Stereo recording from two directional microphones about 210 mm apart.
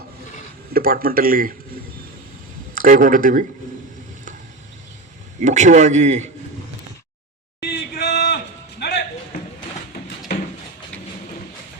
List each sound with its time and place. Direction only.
0.7 s speech: 45° right (ahead or behind)
2.7 s a man's voice: 40° right (ahead or behind)
5.4 s a man's voice: 35° right (ahead or behind)
7.6 s a sound: 50° left (ahead or behind)
8.8 s music: 50° left (ahead or behind)